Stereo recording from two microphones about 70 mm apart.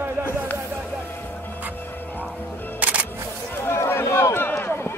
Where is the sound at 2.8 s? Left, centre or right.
Right.